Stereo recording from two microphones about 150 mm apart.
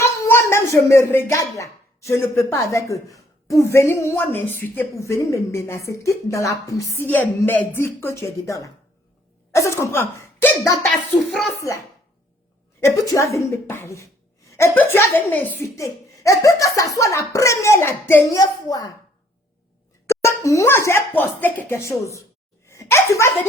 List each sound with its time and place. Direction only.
0.0 s speech: 15° left (ahead or behind)
10.8 s a child's voice: centre (ahead or behind)
12.8 s speech: 20° left (ahead or behind)
20.1 s a child's voice: 20° left (ahead or behind)